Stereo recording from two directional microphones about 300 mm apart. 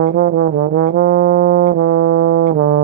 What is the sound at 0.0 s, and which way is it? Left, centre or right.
Brass instrument, right.